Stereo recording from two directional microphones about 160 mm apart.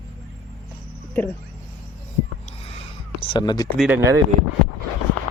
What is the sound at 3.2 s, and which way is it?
Speech, 30° left (ahead or behind).